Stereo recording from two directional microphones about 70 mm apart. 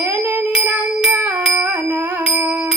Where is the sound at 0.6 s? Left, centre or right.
Right.